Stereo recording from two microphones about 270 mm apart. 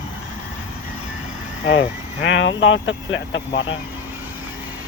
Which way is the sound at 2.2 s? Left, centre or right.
Left.